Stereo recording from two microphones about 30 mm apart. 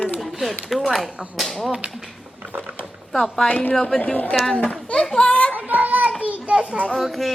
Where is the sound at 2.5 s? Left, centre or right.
Right.